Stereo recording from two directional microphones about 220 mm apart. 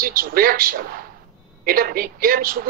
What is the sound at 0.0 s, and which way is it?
A man's voice, 40° right (ahead or behind).